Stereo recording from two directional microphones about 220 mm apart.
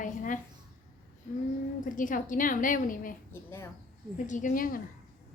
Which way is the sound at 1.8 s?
35° left (ahead or behind).